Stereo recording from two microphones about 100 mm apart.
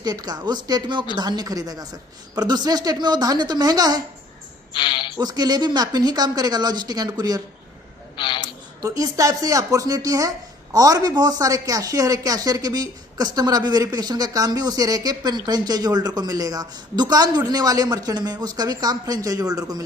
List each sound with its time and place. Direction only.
0.0 s speech: 40° right (ahead or behind)
4.7 s a sound: 55° left (ahead or behind)
5.2 s speech: 40° right (ahead or behind)
8.1 s a man's voice: 55° left (ahead or behind)
8.8 s speech: 35° right (ahead or behind)